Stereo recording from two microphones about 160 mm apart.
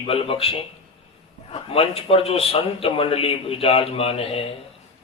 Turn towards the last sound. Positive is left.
turn(degrees=35)  # may be behind; listen again after turning